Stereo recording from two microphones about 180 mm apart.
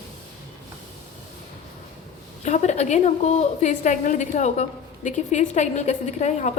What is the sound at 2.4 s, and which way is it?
A woman's voice, 40° left (ahead or behind).